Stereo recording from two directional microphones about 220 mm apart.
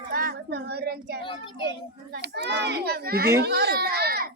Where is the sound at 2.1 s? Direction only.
50° right (ahead or behind).